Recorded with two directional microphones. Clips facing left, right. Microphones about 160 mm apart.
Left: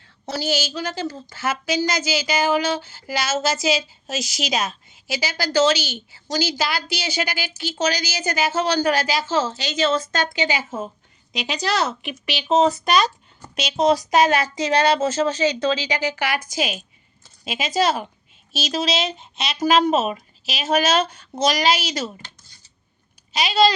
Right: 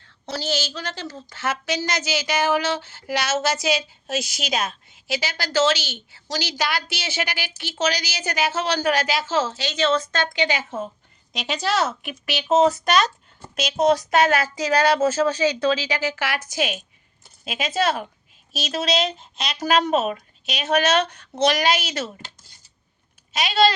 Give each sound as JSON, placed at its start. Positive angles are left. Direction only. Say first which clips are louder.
{"t": 0.3, "sound": "a woman's voice", "louder": "left 2 dB", "side_deg": 10}
{"t": 4.1, "sound": "a woman's voice", "louder": "even", "side_deg": -55}
{"t": 4.7, "sound": "a woman's voice", "louder": "right 1 dB", "side_deg": 0}
{"t": 14.2, "sound": "a woman's voice", "louder": "left 1 dB", "side_deg": -5}
{"t": 23.3, "sound": "a woman's voice", "louder": "left 1 dB", "side_deg": 0}